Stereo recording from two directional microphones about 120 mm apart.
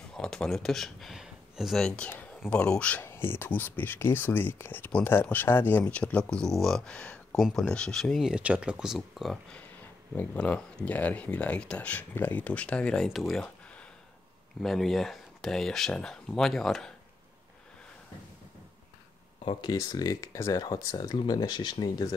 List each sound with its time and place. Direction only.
0.2 s speech: 5° left (ahead or behind)
19.4 s speech: 35° left (ahead or behind)